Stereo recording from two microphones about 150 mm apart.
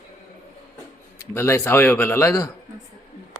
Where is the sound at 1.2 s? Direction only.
20° left (ahead or behind).